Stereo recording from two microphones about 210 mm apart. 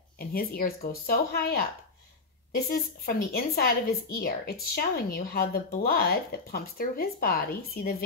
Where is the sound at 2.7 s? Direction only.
45° left (ahead or behind).